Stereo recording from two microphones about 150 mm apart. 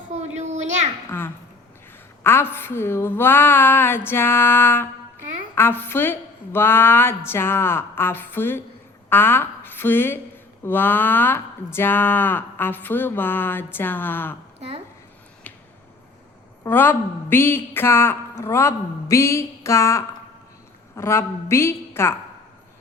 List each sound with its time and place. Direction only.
0.1 s a sound: 50° right (ahead or behind)
1.1 s speech: 15° left (ahead or behind)
16.6 s speech: 15° left (ahead or behind)